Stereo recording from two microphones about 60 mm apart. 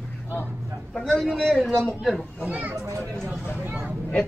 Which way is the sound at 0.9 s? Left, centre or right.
Centre.